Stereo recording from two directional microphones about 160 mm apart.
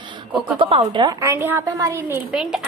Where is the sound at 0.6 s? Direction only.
35° right (ahead or behind); by 2.3 s 15° right (ahead or behind).